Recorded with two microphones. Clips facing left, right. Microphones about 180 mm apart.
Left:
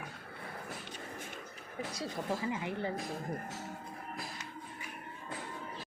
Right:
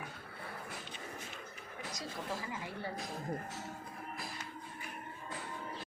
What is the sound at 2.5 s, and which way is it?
Speech, 20° left (ahead or behind).